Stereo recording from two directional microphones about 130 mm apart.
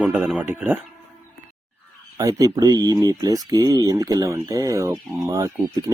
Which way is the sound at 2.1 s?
25° right (ahead or behind).